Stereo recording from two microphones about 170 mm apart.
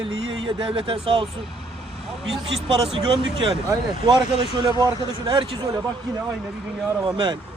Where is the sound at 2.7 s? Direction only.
30° right (ahead or behind).